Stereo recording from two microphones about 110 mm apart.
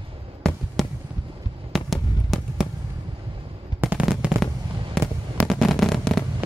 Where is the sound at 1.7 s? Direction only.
Centre (ahead or behind).